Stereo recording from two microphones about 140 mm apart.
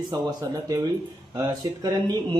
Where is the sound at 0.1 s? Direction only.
25° right (ahead or behind).